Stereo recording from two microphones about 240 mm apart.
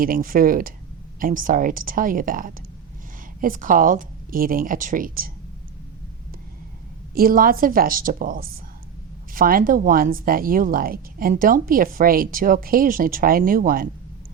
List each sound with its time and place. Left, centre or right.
0.0 s speech: right
7.1 s speech: right